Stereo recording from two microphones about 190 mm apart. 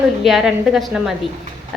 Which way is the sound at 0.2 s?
Centre (ahead or behind).